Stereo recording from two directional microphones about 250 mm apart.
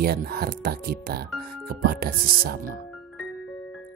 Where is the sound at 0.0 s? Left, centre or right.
Right.